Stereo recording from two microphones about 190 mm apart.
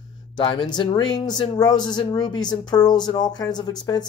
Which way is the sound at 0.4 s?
25° left (ahead or behind).